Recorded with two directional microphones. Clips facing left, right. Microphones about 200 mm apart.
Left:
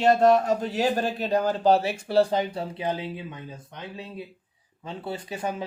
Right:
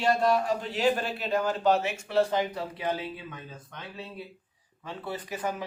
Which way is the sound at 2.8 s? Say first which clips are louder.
Left 2 dB; 15° left (ahead or behind).